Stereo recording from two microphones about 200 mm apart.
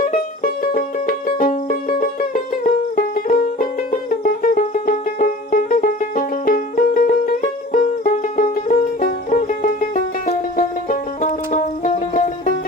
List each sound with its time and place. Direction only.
0.1 s music: 45° left (ahead or behind)